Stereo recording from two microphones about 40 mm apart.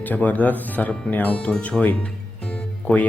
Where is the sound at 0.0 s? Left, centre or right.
Left.